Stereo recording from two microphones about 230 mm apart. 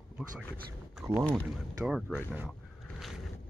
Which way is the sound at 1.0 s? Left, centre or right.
Centre.